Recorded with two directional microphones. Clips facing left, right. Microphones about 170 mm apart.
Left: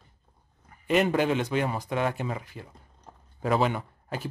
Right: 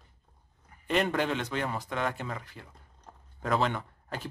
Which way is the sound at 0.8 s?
5° left (ahead or behind).